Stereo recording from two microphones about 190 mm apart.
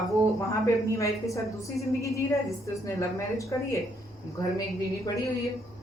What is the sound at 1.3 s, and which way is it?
A woman's voice, 15° left (ahead or behind).